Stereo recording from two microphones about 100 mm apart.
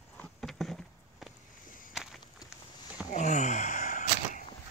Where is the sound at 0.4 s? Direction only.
Centre (ahead or behind).